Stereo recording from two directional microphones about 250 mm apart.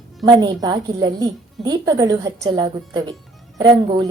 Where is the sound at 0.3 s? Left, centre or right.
Centre.